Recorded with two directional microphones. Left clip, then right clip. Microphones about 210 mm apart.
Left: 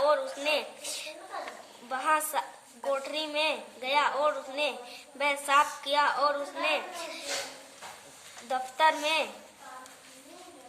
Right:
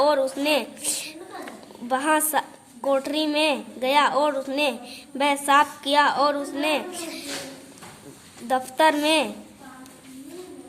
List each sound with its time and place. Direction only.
0.0 s a sound: 45° right (ahead or behind)
1.9 s a woman's voice: 45° right (ahead or behind)
8.4 s a woman's voice: 45° right (ahead or behind)